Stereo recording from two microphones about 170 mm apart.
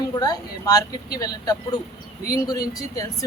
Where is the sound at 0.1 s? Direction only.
25° left (ahead or behind).